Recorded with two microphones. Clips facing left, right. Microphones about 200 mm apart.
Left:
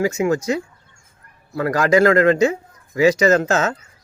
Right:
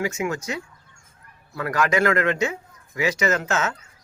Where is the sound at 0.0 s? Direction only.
35° left (ahead or behind).